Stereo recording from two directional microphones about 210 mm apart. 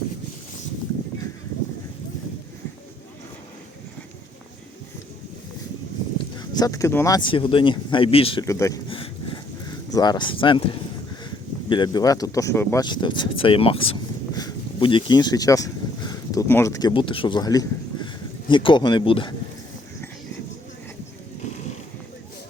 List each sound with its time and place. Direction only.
6.1 s speech: 20° left (ahead or behind)
8.4 s speech: 15° left (ahead or behind)
8.9 s a sound: 25° left (ahead or behind)
9.9 s speech: 20° left (ahead or behind)
11.7 s speech: 20° left (ahead or behind)